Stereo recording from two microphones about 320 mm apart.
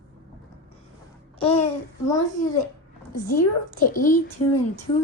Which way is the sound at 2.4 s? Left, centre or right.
Left.